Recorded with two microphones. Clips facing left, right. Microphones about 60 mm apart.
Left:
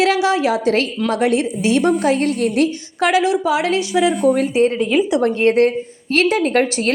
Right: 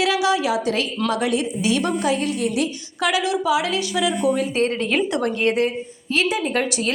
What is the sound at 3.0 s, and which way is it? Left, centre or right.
A woman's voice, left.